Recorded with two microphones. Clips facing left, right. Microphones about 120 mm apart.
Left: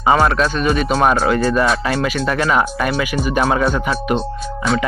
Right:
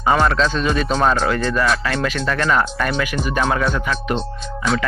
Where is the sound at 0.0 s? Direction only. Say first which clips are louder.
Left 2 dB; 10° left (ahead or behind).